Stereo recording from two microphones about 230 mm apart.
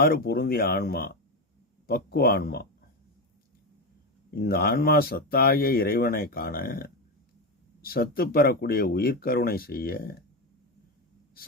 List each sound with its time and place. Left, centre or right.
0.0 s speech: left
4.4 s speech: left